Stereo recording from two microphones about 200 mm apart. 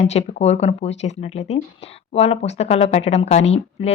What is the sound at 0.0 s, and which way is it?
Speech, 35° left (ahead or behind).